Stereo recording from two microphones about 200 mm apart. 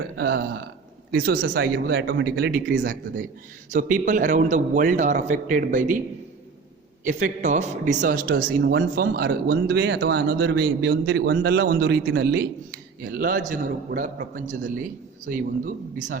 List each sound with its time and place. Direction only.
0.2 s a man's voice: 55° right (ahead or behind)
1.4 s a man's voice: 60° right (ahead or behind); by 6.0 s 40° right (ahead or behind)
7.0 s a man's voice: 40° right (ahead or behind)